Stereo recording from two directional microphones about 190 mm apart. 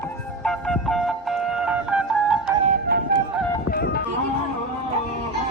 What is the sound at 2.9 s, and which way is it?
Music, 55° right (ahead or behind).